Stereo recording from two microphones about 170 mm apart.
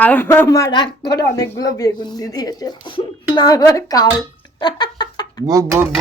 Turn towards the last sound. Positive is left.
turn(degrees=-20)  # may be behind; listen again after turning